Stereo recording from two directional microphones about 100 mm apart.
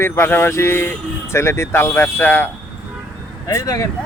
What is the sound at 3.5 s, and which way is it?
Speech, 35° left (ahead or behind).